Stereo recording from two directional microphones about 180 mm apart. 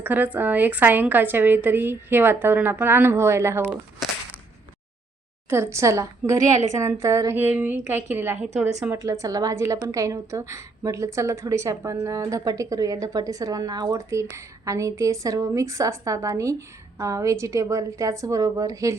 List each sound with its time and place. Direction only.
0.0 s a woman's voice: 10° right (ahead or behind)
5.5 s a woman's voice: 15° right (ahead or behind)